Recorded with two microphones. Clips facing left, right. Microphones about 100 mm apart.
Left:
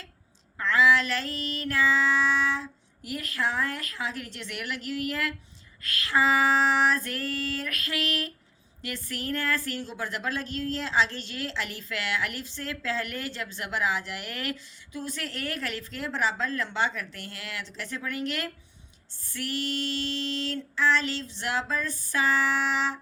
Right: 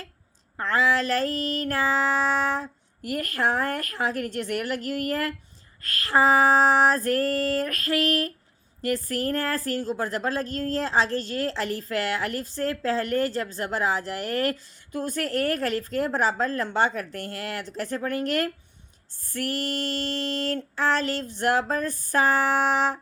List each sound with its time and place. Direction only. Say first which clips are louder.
0.5 s child singing: left 1 dB; 40° right (ahead or behind)
5.8 s a woman's voice: right 4 dB; 45° right (ahead or behind)
19.3 s child singing: right 3 dB; 45° right (ahead or behind)